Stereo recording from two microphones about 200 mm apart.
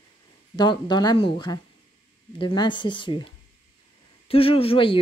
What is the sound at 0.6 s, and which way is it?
Speech, 20° left (ahead or behind).